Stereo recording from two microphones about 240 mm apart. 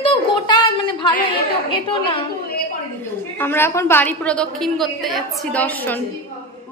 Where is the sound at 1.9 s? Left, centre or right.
Left.